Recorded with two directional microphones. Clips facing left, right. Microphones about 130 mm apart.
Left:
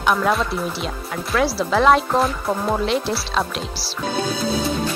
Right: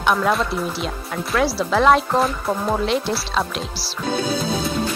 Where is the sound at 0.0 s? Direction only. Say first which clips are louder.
Even; centre (ahead or behind).